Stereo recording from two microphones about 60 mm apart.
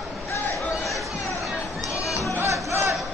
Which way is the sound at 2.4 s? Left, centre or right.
Right.